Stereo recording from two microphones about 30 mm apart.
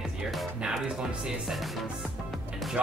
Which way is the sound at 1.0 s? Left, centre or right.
Centre.